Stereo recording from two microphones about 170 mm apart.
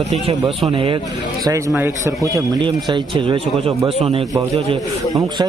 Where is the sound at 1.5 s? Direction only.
20° right (ahead or behind).